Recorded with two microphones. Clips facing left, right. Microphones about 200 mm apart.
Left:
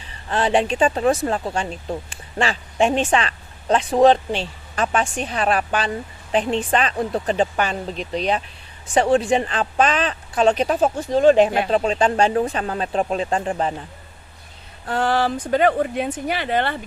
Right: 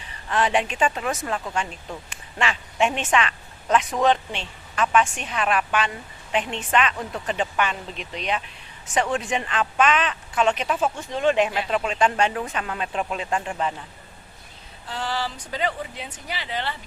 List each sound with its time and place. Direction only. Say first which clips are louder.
0.1 s speech: left 3 dB; 30° left (ahead or behind)
14.8 s speech: left 9 dB; 55° left (ahead or behind)